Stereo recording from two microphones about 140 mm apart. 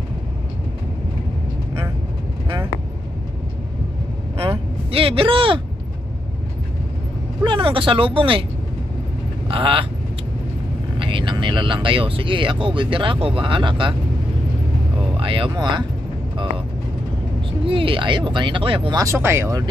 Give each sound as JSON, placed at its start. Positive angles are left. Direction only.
{"t": 4.4, "sound": "vehicle", "side_deg": -40}
{"t": 7.4, "sound": "speech", "side_deg": -40}
{"t": 9.5, "sound": "speech", "side_deg": -40}
{"t": 11.0, "sound": "speech", "side_deg": -35}
{"t": 15.1, "sound": "speech", "side_deg": -40}
{"t": 17.5, "sound": "speech", "side_deg": -40}
{"t": 19.0, "sound": "speech", "side_deg": -20}